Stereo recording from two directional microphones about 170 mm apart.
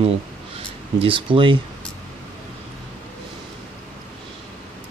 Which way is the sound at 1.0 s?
30° right (ahead or behind).